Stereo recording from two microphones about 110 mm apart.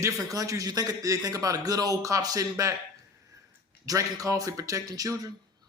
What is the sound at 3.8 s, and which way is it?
Speech, 35° right (ahead or behind).